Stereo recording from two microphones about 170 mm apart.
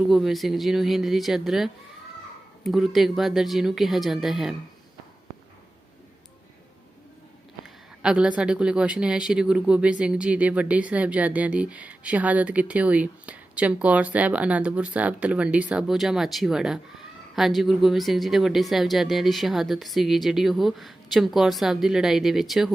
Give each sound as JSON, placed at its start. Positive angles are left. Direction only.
{"t": 0.1, "sound": "speech", "side_deg": 0}
{"t": 7.6, "sound": "speech", "side_deg": -5}